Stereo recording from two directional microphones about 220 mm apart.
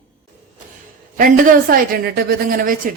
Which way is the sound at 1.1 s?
40° right (ahead or behind).